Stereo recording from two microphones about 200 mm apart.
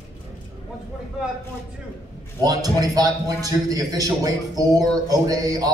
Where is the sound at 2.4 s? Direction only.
20° right (ahead or behind).